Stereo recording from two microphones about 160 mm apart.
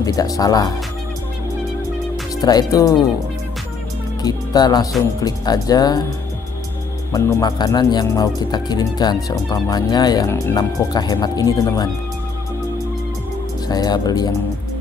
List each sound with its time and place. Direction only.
0.0 s speech: 20° left (ahead or behind)
2.4 s speech: 25° left (ahead or behind)
4.2 s speech: 25° left (ahead or behind)
7.1 s speech: 20° left (ahead or behind)
13.7 s speech: 25° left (ahead or behind)